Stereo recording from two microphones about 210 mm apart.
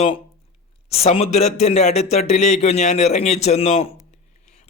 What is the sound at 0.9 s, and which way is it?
A man's voice, 30° left (ahead or behind).